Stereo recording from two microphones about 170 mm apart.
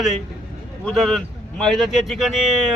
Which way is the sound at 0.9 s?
Centre (ahead or behind).